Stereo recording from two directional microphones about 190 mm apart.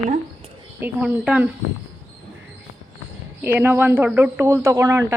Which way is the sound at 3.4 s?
10° right (ahead or behind).